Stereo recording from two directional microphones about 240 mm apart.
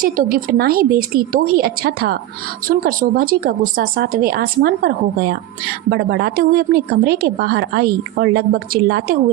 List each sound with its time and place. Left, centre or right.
0.0 s a woman's voice: right